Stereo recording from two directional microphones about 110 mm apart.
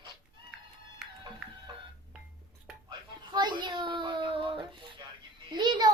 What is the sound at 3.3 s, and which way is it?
Child singing, 40° right (ahead or behind).